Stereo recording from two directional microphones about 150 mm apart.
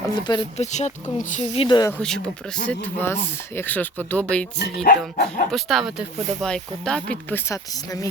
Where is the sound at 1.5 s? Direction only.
35° left (ahead or behind).